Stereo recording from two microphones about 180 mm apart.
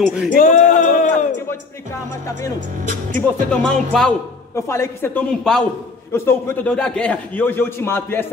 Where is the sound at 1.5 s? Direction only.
15° left (ahead or behind).